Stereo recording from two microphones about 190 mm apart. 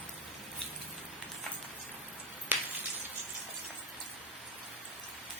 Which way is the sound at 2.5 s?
10° right (ahead or behind).